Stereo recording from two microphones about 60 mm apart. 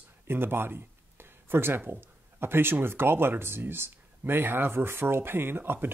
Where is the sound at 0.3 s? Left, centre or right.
Right.